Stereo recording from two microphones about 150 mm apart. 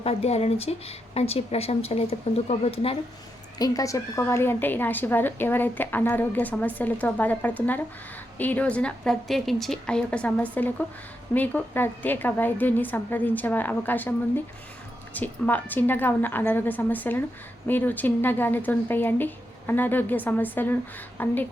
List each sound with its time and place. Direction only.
0.0 s speech: 45° left (ahead or behind)
3.6 s a woman's voice: 20° left (ahead or behind)